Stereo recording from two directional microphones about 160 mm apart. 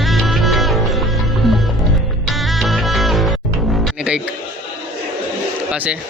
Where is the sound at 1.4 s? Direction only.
Centre (ahead or behind).